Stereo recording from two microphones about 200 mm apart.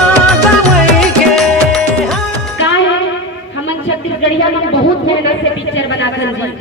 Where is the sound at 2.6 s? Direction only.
65° left (ahead or behind).